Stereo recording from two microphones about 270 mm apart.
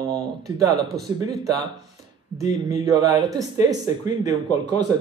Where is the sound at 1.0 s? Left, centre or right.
Right.